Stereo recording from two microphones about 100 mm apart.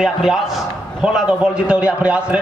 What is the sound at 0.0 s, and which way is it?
A man's voice, 5° right (ahead or behind).